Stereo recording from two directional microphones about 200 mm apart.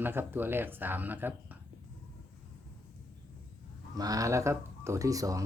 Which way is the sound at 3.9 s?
20° right (ahead or behind).